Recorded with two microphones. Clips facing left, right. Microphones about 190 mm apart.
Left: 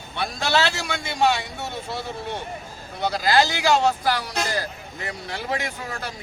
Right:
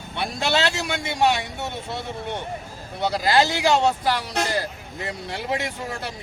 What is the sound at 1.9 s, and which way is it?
Speech, 20° right (ahead or behind).